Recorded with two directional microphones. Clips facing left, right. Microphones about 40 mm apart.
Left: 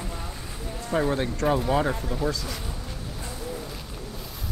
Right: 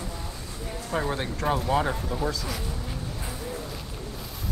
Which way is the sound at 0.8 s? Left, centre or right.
Centre.